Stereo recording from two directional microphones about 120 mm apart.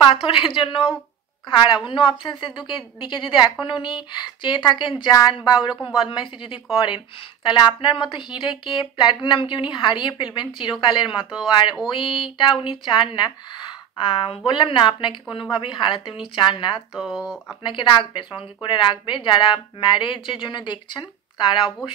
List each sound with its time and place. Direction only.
0.0 s a woman's voice: 50° left (ahead or behind)
16.9 s speech: 5° right (ahead or behind)
17.6 s a woman's voice: 40° left (ahead or behind)